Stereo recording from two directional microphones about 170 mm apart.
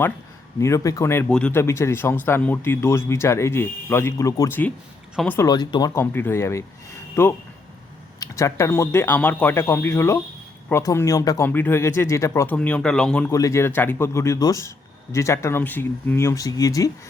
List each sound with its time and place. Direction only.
0.6 s speech: 20° left (ahead or behind)
5.4 s speech: 25° left (ahead or behind)
12.5 s speech: 5° left (ahead or behind)
13.3 s speech: 20° left (ahead or behind)